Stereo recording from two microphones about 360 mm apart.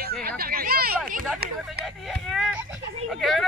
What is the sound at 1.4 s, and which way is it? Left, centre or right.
Speech, right.